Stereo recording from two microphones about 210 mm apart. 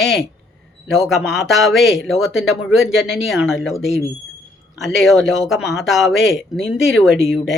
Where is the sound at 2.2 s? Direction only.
75° left (ahead or behind).